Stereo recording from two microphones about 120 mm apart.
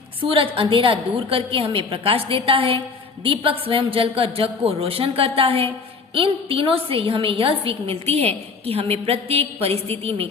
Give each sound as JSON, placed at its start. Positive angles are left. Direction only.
{"t": 0.2, "sound": "a woman's voice", "side_deg": -50}